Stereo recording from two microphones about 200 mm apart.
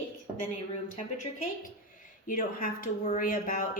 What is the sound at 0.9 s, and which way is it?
A woman's voice, 40° left (ahead or behind).